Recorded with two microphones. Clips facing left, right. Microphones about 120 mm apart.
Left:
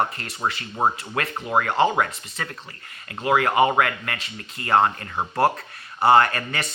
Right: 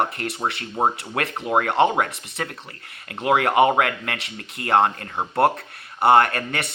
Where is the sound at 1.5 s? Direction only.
60° right (ahead or behind).